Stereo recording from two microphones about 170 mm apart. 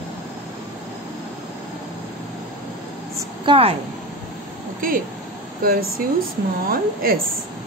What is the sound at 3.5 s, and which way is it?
Speech, 35° right (ahead or behind).